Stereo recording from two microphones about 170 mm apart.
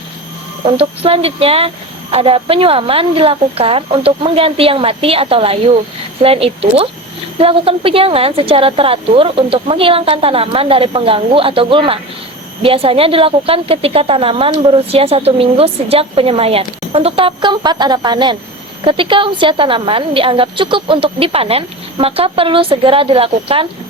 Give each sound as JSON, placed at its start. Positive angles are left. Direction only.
{"t": 0.6, "sound": "speech", "side_deg": -35}